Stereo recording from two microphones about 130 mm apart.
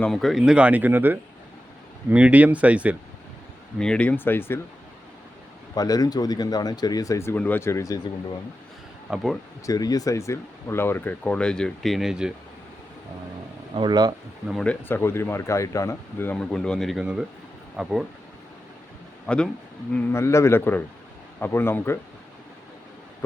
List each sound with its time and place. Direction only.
0.0 s speech: centre (ahead or behind)
3.8 s speech: 5° left (ahead or behind)
5.7 s speech: 30° left (ahead or behind)
9.0 s speech: centre (ahead or behind)
9.6 s speech: 30° left (ahead or behind); by 12.3 s 5° right (ahead or behind)
13.7 s speech: 35° right (ahead or behind)
14.6 s speech: 15° left (ahead or behind); by 17.9 s 5° right (ahead or behind)
19.3 s speech: 10° left (ahead or behind)